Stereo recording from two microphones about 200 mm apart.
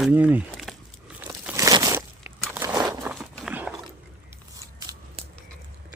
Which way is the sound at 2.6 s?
15° right (ahead or behind).